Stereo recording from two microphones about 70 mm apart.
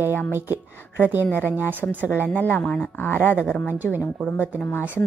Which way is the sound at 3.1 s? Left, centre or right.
Left.